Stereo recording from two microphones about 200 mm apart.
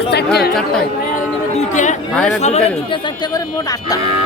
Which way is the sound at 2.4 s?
30° left (ahead or behind).